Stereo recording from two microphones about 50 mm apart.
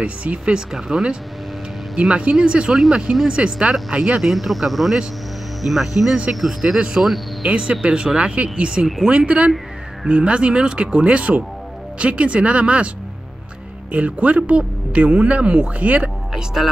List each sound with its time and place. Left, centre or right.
0.0 s speech: right
0.7 s speech: centre
4.3 s speech: centre
7.4 s speech: right
13.9 s speech: right